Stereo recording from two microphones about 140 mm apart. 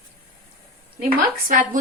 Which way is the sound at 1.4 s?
75° right (ahead or behind).